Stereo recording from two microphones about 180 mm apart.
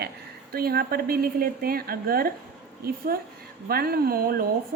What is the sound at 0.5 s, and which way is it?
A woman's voice, 55° right (ahead or behind).